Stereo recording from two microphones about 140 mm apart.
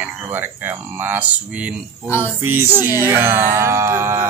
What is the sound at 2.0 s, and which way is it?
Music, 20° left (ahead or behind).